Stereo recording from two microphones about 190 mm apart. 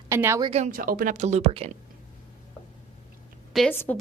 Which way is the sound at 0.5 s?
40° right (ahead or behind).